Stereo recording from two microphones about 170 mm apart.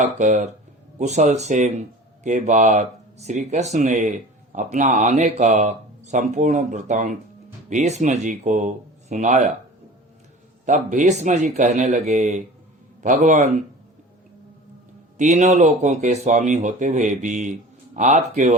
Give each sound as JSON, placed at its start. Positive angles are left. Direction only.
{"t": 0.0, "sound": "speech", "side_deg": -50}
{"t": 10.7, "sound": "speech", "side_deg": -50}
{"t": 15.2, "sound": "speech", "side_deg": -45}